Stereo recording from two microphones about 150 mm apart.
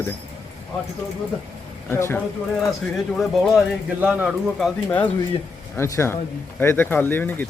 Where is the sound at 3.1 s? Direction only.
Centre (ahead or behind).